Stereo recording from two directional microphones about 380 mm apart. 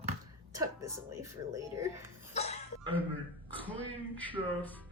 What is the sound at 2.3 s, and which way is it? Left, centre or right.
Music, centre.